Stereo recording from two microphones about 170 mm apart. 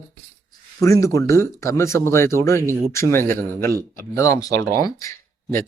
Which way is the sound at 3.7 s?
60° right (ahead or behind).